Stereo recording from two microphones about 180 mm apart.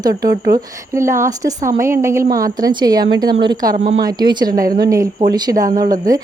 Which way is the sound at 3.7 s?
35° right (ahead or behind).